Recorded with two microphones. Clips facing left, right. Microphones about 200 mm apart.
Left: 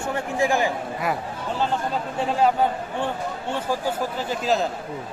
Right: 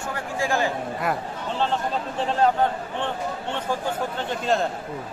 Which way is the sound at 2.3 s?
10° left (ahead or behind).